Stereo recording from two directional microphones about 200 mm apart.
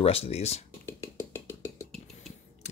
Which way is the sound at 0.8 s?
10° left (ahead or behind).